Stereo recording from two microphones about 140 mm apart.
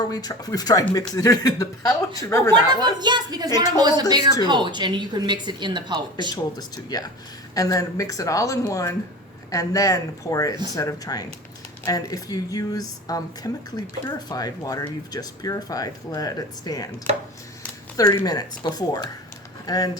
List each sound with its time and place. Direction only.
0.0 s speech: 30° left (ahead or behind)
2.7 s a woman's voice: 30° right (ahead or behind)
6.3 s speech: 30° left (ahead or behind)
18.3 s speech: 30° left (ahead or behind)